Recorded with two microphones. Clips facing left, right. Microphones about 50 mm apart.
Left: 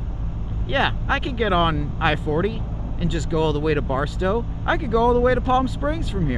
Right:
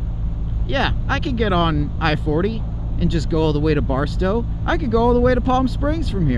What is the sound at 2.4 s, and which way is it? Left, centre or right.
Vehicle, centre.